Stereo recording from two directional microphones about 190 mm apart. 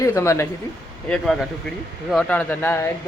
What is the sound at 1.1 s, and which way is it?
Speech, centre (ahead or behind).